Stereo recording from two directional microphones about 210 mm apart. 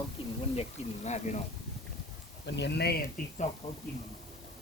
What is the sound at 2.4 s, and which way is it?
Speech, 55° left (ahead or behind).